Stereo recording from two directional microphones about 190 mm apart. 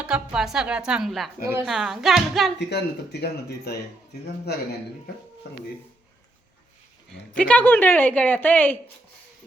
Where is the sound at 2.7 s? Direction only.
60° left (ahead or behind).